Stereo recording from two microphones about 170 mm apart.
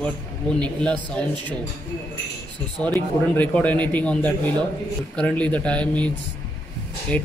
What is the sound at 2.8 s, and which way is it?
A man's voice, 10° left (ahead or behind).